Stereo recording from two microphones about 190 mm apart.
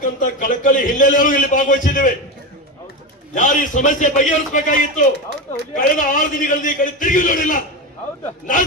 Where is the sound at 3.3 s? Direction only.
40° left (ahead or behind).